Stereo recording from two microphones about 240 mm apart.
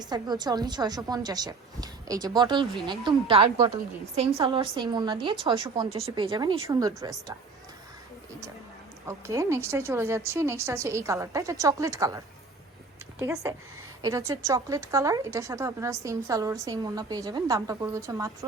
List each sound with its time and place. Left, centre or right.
0.0 s a woman's voice: centre
9.0 s a woman's voice: centre